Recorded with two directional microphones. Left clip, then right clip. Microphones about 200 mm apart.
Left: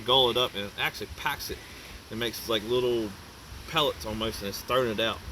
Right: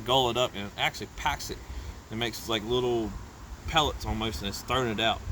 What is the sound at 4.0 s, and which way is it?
Speech, 45° right (ahead or behind).